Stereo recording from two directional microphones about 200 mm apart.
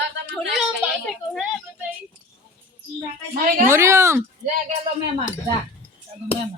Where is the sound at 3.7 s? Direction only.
15° right (ahead or behind).